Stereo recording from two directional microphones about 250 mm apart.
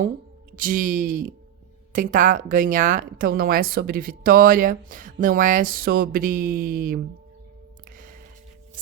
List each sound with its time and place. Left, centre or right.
0.5 s speech: right
7.9 s music: right